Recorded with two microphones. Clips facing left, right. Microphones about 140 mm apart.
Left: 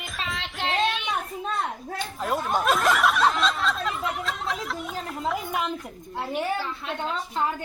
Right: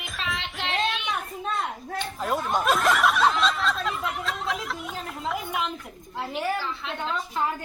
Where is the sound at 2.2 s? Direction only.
Centre (ahead or behind).